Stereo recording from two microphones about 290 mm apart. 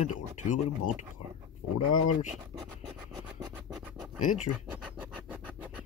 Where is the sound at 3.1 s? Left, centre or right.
Centre.